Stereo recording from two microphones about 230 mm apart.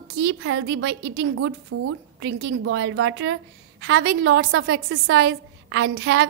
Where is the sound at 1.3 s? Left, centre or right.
Right.